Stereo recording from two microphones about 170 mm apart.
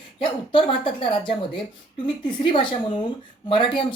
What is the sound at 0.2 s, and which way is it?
Speech, 30° left (ahead or behind).